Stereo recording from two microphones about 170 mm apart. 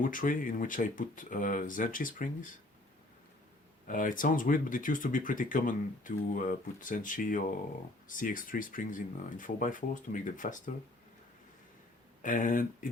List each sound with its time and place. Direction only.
0.0 s speech: 55° left (ahead or behind)
3.8 s speech: 50° left (ahead or behind)
12.2 s speech: 50° left (ahead or behind)